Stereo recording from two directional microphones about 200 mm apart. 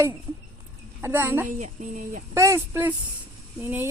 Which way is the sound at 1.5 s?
40° right (ahead or behind).